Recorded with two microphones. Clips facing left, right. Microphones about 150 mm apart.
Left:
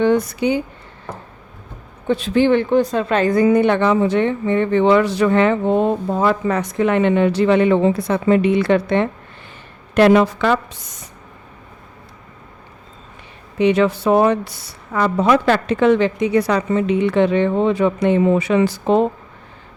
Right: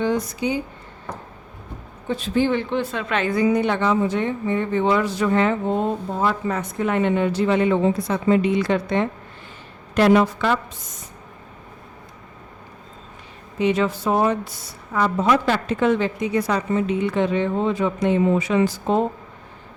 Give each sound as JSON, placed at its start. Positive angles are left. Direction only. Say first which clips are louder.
{"t": 0.0, "sound": "speech", "louder": "left 6 dB", "side_deg": 65}
{"t": 2.0, "sound": "a woman's voice", "louder": "left 6 dB", "side_deg": 75}
{"t": 2.7, "sound": "a woman's voice", "louder": "left 7 dB", "side_deg": 40}
{"t": 9.9, "sound": "a woman's voice", "louder": "left 4 dB", "side_deg": 80}
{"t": 13.6, "sound": "a woman's voice", "louder": "left 5 dB", "side_deg": 70}